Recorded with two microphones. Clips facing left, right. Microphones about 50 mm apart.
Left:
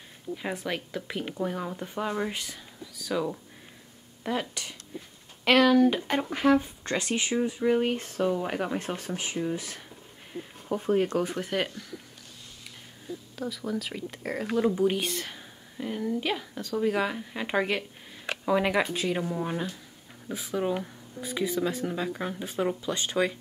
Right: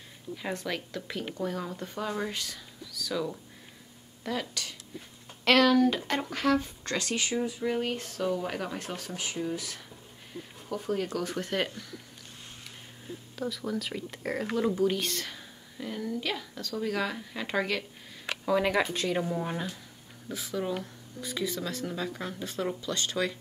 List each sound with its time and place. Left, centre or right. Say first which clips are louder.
0.4 s speech: left 1 dB; centre
5.4 s speech: left 2 dB; centre; by 9.4 s left
10.7 s speech: left 6 dB; left
11.2 s speech: left 1 dB; centre
13.4 s speech: even; centre
14.8 s speech: left 2 dB; centre
20.2 s speech: left 3 dB; centre